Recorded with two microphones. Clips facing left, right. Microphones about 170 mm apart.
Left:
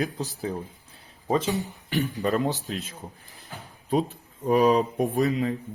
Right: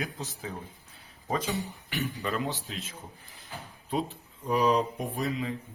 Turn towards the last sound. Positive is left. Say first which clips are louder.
# left 8 dB
turn(degrees=45)  # may be behind; listen again after turning